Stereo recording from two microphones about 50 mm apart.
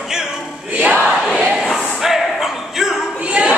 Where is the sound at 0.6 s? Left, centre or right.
Right.